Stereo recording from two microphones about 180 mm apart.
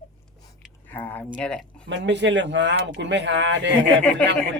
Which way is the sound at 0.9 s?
10° left (ahead or behind).